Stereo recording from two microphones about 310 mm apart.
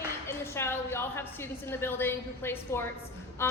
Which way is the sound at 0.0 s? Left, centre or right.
Centre.